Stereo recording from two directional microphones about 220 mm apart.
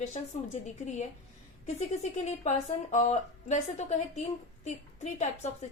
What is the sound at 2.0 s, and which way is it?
A woman's voice, 30° left (ahead or behind).